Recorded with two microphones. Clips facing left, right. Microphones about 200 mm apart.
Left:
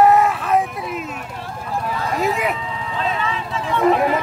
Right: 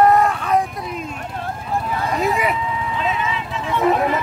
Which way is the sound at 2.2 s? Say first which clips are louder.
Even; centre (ahead or behind).